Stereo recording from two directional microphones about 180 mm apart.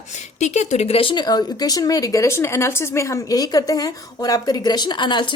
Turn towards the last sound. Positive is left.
turn(degrees=25)  # may be behind; listen again after turning